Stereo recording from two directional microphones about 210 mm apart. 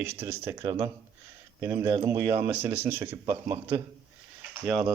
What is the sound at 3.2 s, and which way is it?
Speech, 25° right (ahead or behind).